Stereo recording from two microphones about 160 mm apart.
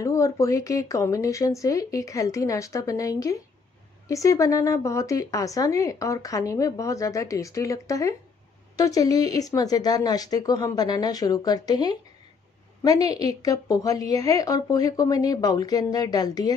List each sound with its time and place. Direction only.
0.0 s speech: 20° left (ahead or behind)